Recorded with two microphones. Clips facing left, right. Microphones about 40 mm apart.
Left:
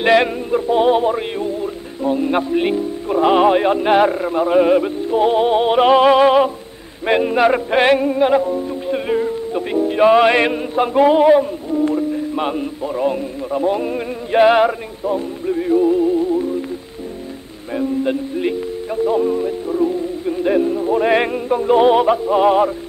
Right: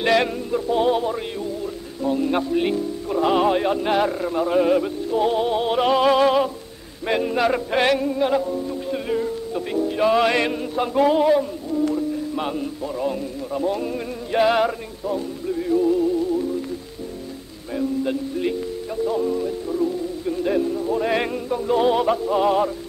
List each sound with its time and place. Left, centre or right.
0.0 s music: left
17.7 s music: left
19.0 s speech: left